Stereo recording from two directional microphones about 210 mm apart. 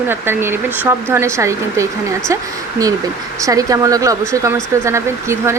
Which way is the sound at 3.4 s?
15° right (ahead or behind).